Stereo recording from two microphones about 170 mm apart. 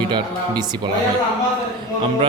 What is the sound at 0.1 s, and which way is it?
Speech, 25° right (ahead or behind).